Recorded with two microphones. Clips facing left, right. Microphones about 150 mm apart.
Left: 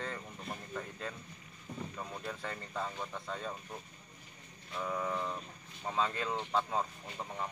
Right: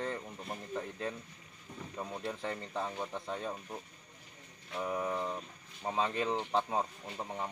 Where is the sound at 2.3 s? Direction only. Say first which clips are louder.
Right 3 dB; 20° right (ahead or behind).